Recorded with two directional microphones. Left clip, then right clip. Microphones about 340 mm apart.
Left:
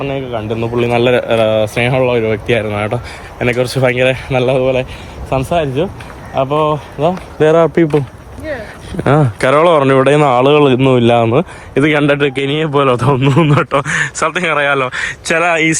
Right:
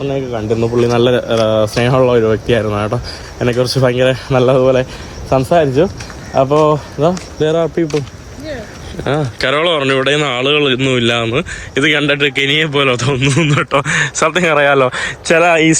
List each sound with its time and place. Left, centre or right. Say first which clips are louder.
0.1 s speech: right 2 dB; centre
7.3 s speech: left 9 dB; left
9.0 s speech: left 4 dB; centre